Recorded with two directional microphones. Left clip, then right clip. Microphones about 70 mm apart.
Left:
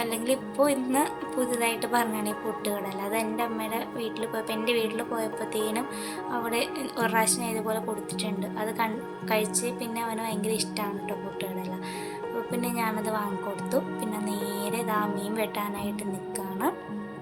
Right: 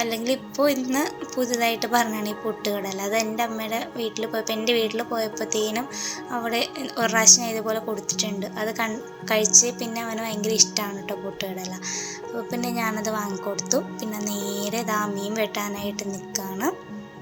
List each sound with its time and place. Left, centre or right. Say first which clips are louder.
0.0 s a woman's voice: right 3 dB; right
12.5 s a woman's voice: right 4 dB; right